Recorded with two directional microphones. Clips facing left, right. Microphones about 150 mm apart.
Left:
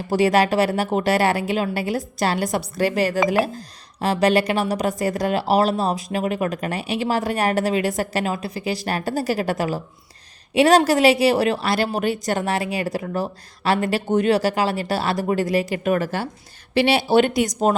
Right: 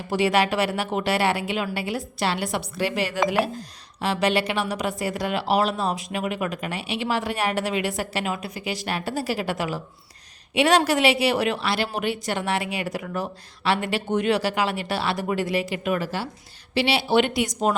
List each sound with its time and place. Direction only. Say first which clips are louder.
0.1 s speech: left 4 dB; 40° left (ahead or behind)